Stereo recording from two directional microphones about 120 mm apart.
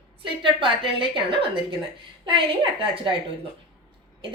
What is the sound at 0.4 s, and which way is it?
A woman's voice, 45° right (ahead or behind).